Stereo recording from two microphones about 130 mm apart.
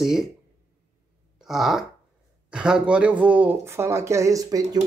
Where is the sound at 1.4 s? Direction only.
Centre (ahead or behind); by 4.8 s 30° right (ahead or behind).